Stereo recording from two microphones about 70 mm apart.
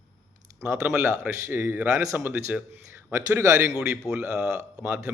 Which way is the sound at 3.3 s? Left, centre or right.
Right.